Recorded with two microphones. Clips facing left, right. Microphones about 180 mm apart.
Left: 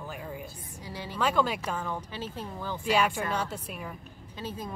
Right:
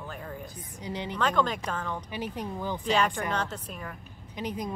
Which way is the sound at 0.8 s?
20° right (ahead or behind).